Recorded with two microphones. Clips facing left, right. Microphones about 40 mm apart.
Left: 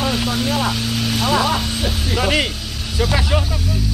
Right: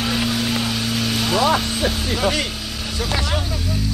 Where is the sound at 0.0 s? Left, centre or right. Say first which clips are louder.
Left 1 dB; centre.